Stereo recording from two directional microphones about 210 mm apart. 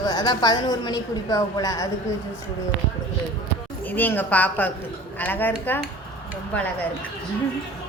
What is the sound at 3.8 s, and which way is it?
A woman's voice, 10° left (ahead or behind).